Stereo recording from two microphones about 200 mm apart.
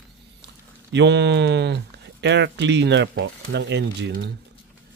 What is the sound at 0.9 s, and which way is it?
Speech, 60° right (ahead or behind).